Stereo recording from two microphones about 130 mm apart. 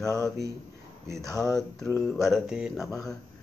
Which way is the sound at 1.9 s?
15° left (ahead or behind).